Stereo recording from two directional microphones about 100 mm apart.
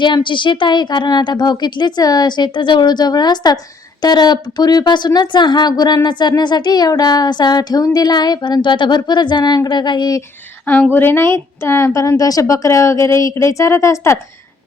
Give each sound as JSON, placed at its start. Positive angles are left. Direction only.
{"t": 0.0, "sound": "a woman's voice", "side_deg": 50}
{"t": 10.9, "sound": "a woman's voice", "side_deg": 20}